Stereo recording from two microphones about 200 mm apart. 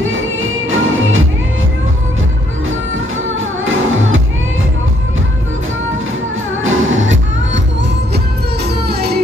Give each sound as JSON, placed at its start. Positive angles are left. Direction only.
{"t": 0.0, "sound": "music", "side_deg": -80}
{"t": 3.6, "sound": "music", "side_deg": -85}
{"t": 6.6, "sound": "music", "side_deg": -75}
{"t": 8.6, "sound": "music", "side_deg": -55}